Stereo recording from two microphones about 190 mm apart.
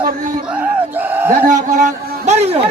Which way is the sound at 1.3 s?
45° right (ahead or behind).